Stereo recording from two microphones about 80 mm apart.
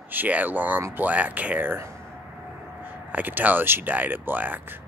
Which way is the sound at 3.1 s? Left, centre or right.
Right.